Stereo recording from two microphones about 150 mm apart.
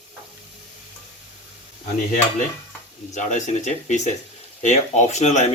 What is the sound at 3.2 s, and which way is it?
Speech, 55° left (ahead or behind).